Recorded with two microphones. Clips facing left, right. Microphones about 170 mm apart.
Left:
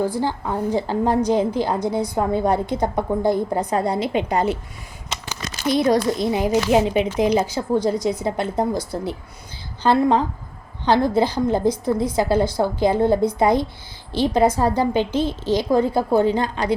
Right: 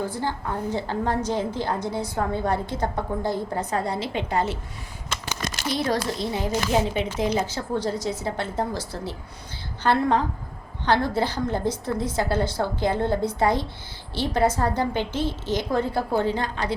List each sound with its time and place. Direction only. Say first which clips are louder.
0.1 s a woman's voice: left 5 dB; 15° left (ahead or behind)
5.6 s a woman's voice: left 8 dB; 20° left (ahead or behind)
9.8 s a woman's voice: left 4 dB; 15° left (ahead or behind)